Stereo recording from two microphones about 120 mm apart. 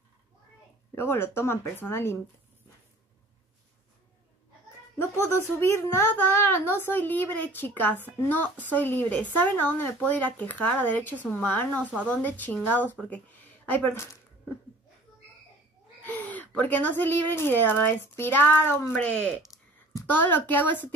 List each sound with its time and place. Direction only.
0.9 s speech: 20° left (ahead or behind)
5.1 s speech: 25° left (ahead or behind)
16.1 s speech: 15° left (ahead or behind)